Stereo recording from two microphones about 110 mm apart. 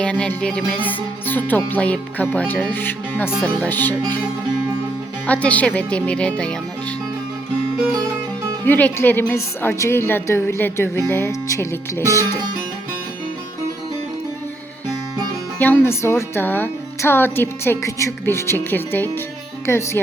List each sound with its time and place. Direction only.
0.0 s music: 10° left (ahead or behind)
5.2 s music: 15° left (ahead or behind)
8.6 s speech: 15° left (ahead or behind)
15.5 s speech: 15° left (ahead or behind)